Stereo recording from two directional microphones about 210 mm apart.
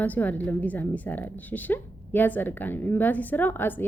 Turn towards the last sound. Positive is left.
turn(degrees=10)  # may be behind; listen again after turning